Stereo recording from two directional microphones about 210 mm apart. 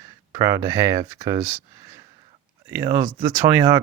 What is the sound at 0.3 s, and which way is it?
Speech, 15° right (ahead or behind).